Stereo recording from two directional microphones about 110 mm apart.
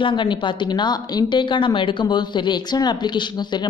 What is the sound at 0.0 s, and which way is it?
A woman's voice, 45° left (ahead or behind).